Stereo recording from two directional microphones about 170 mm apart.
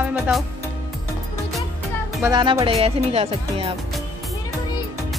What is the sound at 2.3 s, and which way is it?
Speech, 25° right (ahead or behind).